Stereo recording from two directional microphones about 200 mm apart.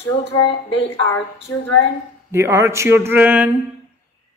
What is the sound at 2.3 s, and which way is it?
Speech, 15° right (ahead or behind).